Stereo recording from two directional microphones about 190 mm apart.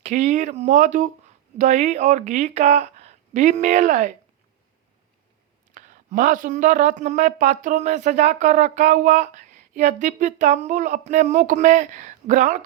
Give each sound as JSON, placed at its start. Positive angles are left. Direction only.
{"t": 0.0, "sound": "speech", "side_deg": -40}
{"t": 5.7, "sound": "speech", "side_deg": -40}